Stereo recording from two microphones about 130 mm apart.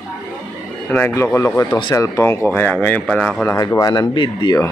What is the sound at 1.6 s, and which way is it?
Speech, 40° left (ahead or behind).